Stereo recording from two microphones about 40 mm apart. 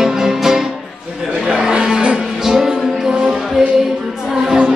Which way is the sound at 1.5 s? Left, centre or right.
Right.